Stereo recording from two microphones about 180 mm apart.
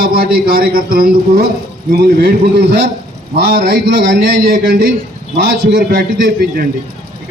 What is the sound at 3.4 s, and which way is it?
A man's voice, 60° right (ahead or behind).